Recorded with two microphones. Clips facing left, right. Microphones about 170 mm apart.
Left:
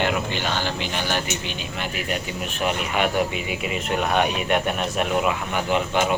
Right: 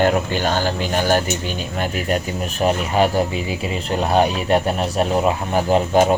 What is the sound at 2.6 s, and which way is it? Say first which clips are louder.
Speech: right 6 dB; 35° right (ahead or behind).